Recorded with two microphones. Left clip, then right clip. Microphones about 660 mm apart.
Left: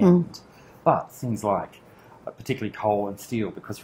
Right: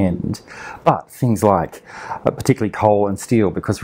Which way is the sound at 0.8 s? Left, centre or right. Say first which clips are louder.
Right 5 dB; right.